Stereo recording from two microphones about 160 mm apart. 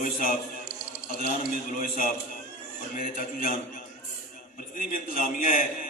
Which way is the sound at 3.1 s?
65° left (ahead or behind).